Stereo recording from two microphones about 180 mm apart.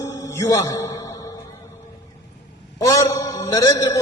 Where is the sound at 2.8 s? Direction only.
20° left (ahead or behind).